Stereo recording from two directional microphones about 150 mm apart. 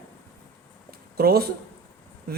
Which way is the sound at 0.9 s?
90° right.